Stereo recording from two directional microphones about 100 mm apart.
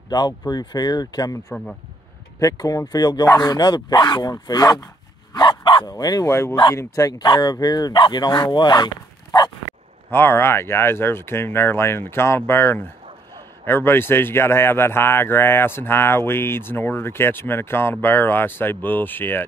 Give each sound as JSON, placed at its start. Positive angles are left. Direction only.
{"t": 0.1, "sound": "speech", "side_deg": 45}
{"t": 2.4, "sound": "speech", "side_deg": 35}
{"t": 5.3, "sound": "dog", "side_deg": 50}
{"t": 5.9, "sound": "speech", "side_deg": 40}
{"t": 6.2, "sound": "speech", "side_deg": 25}
{"t": 7.2, "sound": "speech", "side_deg": 50}
{"t": 10.1, "sound": "speech", "side_deg": 25}